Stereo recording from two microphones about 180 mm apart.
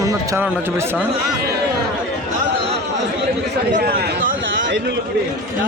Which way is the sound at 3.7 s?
55° right (ahead or behind).